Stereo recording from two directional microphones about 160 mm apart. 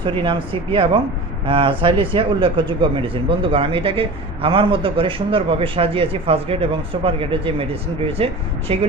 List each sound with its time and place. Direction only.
0.0 s a man's voice: 30° right (ahead or behind)